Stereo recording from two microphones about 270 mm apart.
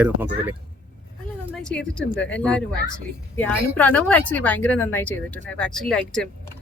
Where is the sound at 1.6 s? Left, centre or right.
Centre.